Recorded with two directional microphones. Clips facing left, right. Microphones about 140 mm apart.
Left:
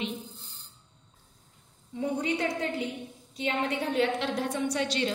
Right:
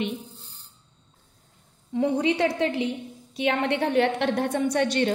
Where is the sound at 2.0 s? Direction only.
90° right.